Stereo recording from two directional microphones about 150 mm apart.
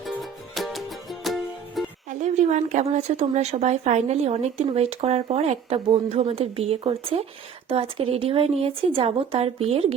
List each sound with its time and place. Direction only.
0.1 s music: centre (ahead or behind)
2.0 s a woman's voice: 50° right (ahead or behind)